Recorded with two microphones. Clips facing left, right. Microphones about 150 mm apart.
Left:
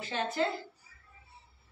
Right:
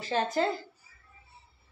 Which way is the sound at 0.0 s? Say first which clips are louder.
Right 4 dB; 40° right (ahead or behind).